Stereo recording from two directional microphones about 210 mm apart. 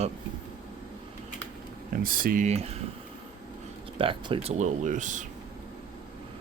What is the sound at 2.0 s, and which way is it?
Speech, 40° right (ahead or behind).